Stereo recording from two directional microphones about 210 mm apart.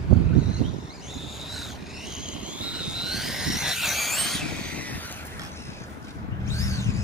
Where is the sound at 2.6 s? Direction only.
5° right (ahead or behind).